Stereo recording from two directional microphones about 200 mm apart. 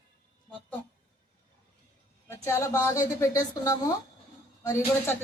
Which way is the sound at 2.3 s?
15° left (ahead or behind).